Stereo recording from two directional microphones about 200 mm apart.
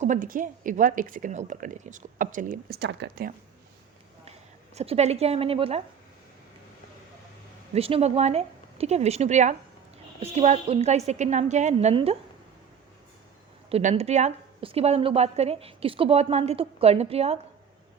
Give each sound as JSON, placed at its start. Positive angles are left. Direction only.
{"t": 0.0, "sound": "a woman's voice", "side_deg": -40}
{"t": 4.3, "sound": "speech", "side_deg": -30}
{"t": 7.7, "sound": "a woman's voice", "side_deg": -30}
{"t": 13.7, "sound": "a woman's voice", "side_deg": -30}